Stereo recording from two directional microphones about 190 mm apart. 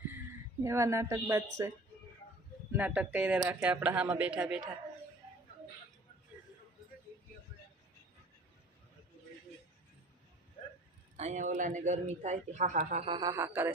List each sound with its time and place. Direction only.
0.6 s speech: 15° right (ahead or behind)
2.7 s speech: 5° right (ahead or behind)
11.2 s speech: 40° right (ahead or behind)
13.1 s speech: 20° right (ahead or behind)